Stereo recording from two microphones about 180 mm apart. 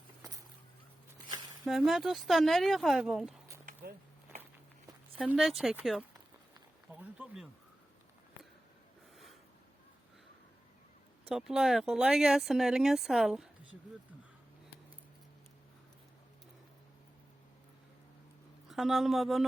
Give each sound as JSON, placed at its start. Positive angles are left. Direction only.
{"t": 1.6, "sound": "speech", "side_deg": 0}
{"t": 5.2, "sound": "speech", "side_deg": 0}
{"t": 11.3, "sound": "speech", "side_deg": 0}
{"t": 18.7, "sound": "speech", "side_deg": 0}